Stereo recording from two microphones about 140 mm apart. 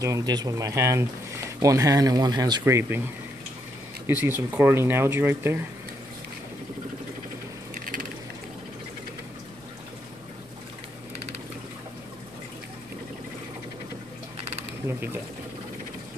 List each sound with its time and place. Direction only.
0.0 s speech: 25° right (ahead or behind)
2.6 s speech: 15° right (ahead or behind)
4.1 s speech: 15° right (ahead or behind)
7.7 s ratchet: 75° right (ahead or behind)
14.9 s speech: 15° right (ahead or behind)